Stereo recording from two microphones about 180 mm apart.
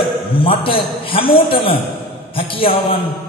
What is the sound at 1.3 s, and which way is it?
Speech, 55° left (ahead or behind).